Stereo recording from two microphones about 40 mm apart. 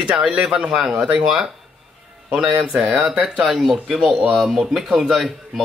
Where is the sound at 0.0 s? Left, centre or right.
Right.